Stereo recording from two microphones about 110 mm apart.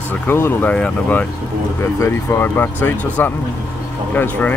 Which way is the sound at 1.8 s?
25° left (ahead or behind).